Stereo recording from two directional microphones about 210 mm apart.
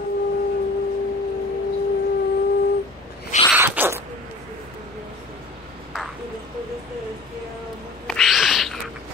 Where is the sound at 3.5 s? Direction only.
10° right (ahead or behind).